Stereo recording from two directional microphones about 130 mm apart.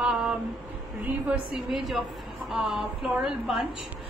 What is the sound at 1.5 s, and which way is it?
A woman's voice, centre (ahead or behind).